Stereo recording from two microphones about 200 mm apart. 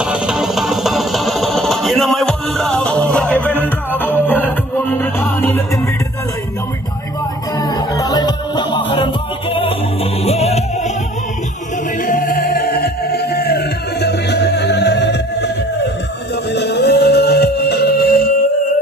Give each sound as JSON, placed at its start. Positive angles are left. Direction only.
{"t": 0.0, "sound": "music", "side_deg": -5}
{"t": 7.6, "sound": "music", "side_deg": 20}
{"t": 12.0, "sound": "music", "side_deg": 45}